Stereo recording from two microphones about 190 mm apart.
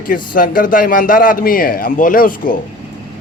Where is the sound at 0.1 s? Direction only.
45° left (ahead or behind).